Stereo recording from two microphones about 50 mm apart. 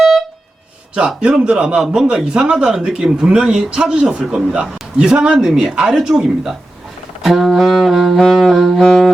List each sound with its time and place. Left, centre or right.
0.9 s speech: centre
7.2 s saxophone: centre
8.8 s brass instrument: centre